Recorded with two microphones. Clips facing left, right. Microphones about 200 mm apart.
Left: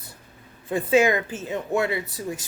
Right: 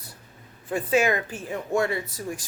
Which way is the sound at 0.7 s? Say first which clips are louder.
Left 3 dB; 25° left (ahead or behind).